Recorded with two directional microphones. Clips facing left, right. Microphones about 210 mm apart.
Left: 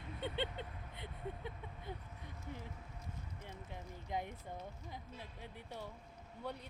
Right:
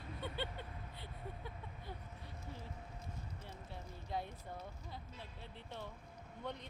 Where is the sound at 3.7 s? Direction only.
15° left (ahead or behind).